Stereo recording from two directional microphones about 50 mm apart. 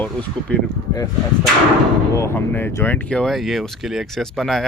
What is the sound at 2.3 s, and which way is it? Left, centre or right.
Speech, left.